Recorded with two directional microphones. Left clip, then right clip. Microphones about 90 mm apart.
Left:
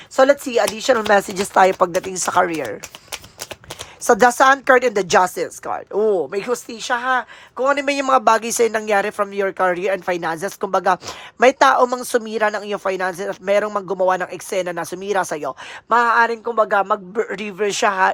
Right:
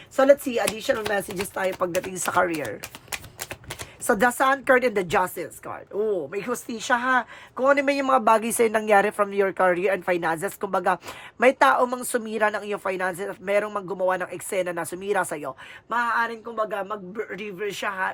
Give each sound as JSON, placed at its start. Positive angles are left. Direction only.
{"t": 0.2, "sound": "speech", "side_deg": 55}
{"t": 0.9, "sound": "speech", "side_deg": 70}
{"t": 1.7, "sound": "speech", "side_deg": 40}
{"t": 3.1, "sound": "a sound", "side_deg": 55}
{"t": 4.0, "sound": "speech", "side_deg": 25}
{"t": 6.0, "sound": "speech", "side_deg": 45}
{"t": 8.5, "sound": "speech", "side_deg": 10}
{"t": 15.9, "sound": "speech", "side_deg": 55}